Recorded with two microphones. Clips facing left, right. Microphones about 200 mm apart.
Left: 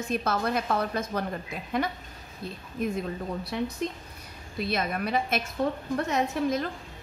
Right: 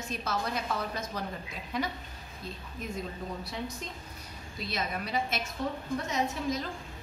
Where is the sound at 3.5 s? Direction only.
60° left (ahead or behind).